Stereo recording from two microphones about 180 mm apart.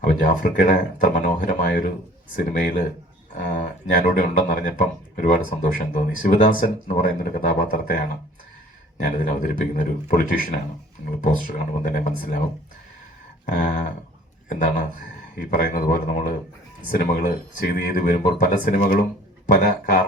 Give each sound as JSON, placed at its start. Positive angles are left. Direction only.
{"t": 0.0, "sound": "speech", "side_deg": 45}
{"t": 9.0, "sound": "speech", "side_deg": 45}
{"t": 13.5, "sound": "speech", "side_deg": 45}